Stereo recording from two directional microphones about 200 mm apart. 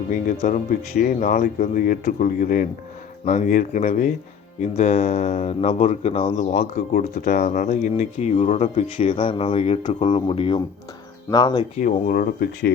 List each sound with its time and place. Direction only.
0.1 s speech: 40° left (ahead or behind)
7.2 s speech: 50° left (ahead or behind); by 11.6 s 20° left (ahead or behind)
11.8 s speech: 40° left (ahead or behind)